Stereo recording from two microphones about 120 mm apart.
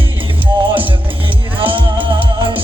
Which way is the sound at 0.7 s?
45° right (ahead or behind).